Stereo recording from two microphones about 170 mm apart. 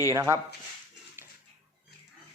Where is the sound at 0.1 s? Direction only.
15° right (ahead or behind).